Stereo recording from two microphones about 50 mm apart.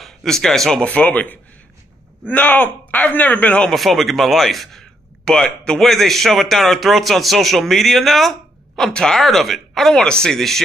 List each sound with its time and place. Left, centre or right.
0.0 s speech: centre
0.8 s speech: left
3.7 s a man's voice: centre
5.2 s speech: centre
5.8 s a man's voice: centre